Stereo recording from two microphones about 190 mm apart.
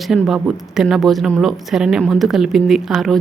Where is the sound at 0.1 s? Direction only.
Centre (ahead or behind).